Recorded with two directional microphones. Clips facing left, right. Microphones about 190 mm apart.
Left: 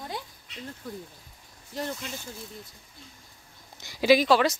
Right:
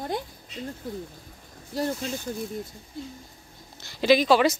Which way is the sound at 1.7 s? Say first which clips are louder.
Right 6 dB; 40° right (ahead or behind).